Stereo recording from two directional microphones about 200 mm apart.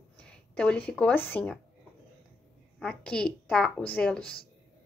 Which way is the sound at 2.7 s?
5° left (ahead or behind).